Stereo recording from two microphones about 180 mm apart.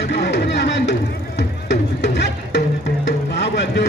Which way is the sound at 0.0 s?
75° left (ahead or behind).